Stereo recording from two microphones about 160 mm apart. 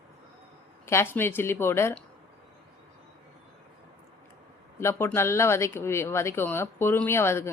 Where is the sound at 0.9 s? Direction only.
15° left (ahead or behind).